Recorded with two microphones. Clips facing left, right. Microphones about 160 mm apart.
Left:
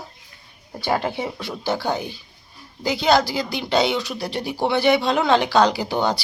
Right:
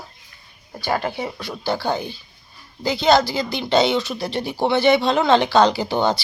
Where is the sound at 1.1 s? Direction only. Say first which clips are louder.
Even; 25° left (ahead or behind).